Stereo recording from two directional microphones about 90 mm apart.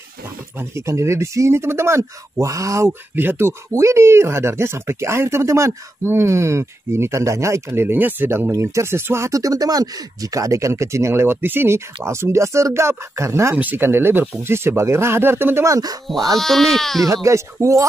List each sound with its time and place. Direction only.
0.6 s speech: 30° right (ahead or behind)
2.9 s speech: 20° right (ahead or behind)
8.5 s speech: 35° right (ahead or behind)
16.3 s speech: centre (ahead or behind)
17.0 s speech: 35° right (ahead or behind)